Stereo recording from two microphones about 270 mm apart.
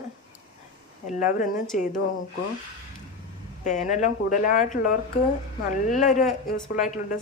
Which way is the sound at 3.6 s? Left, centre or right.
Left.